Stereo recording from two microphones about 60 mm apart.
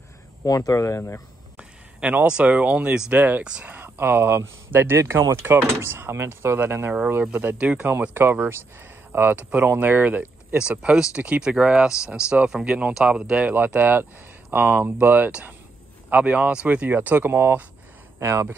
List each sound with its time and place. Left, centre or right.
0.5 s speech: left
1.6 s a sound: centre
2.2 s speech: right
5.7 s speech: right
7.5 s speech: right
8.1 s speech: right
9.4 s speech: right
10.7 s speech: centre
13.0 s speech: centre; by 17.6 s right
18.2 s speech: right